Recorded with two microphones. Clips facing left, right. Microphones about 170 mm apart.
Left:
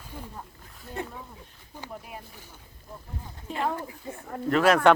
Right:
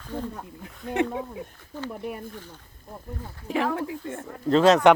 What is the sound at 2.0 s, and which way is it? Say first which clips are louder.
Speech: right 10 dB; 60° right (ahead or behind).